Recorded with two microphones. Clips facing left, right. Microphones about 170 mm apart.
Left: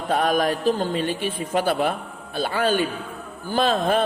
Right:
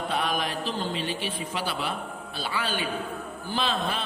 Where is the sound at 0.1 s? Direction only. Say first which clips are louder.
Left 11 dB; 45° left (ahead or behind).